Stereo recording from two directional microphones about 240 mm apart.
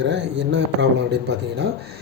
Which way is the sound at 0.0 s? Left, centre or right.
Right.